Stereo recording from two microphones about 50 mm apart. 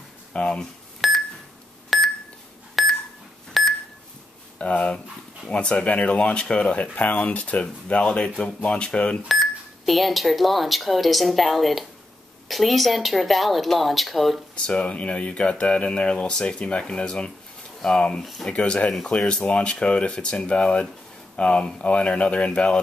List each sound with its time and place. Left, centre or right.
0.3 s speech: left
1.0 s beep: centre
4.6 s speech: left
9.3 s speech: centre
14.5 s speech: left
18.5 s speech: left